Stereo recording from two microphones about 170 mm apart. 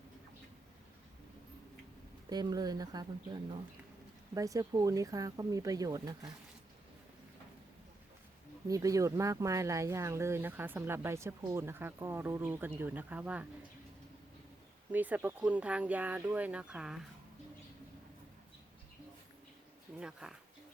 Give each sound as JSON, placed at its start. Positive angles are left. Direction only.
{"t": 2.3, "sound": "speech", "side_deg": -25}
{"t": 4.4, "sound": "speech", "side_deg": -20}
{"t": 8.6, "sound": "speech", "side_deg": -20}
{"t": 14.9, "sound": "speech", "side_deg": -10}
{"t": 20.0, "sound": "speech", "side_deg": -5}